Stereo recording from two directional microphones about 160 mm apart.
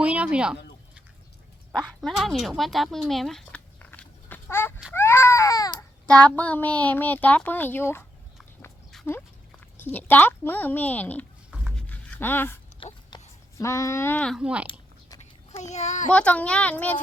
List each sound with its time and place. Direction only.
0.0 s speech: 10° right (ahead or behind)
1.8 s speech: centre (ahead or behind)
4.9 s baby cry: 15° left (ahead or behind)
6.1 s a child's voice: 10° left (ahead or behind)
9.0 s speech: 15° left (ahead or behind)
11.7 s a sound: 5° left (ahead or behind)
12.8 s dog: 30° left (ahead or behind)
13.6 s a child's voice: 20° left (ahead or behind); by 14.7 s 5° right (ahead or behind)
15.5 s a child's voice: 45° left (ahead or behind)
16.1 s a child's voice: 10° left (ahead or behind)